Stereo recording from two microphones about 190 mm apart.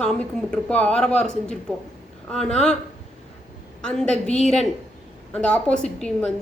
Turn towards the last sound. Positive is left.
turn(degrees=5)  # may be behind; listen again after turning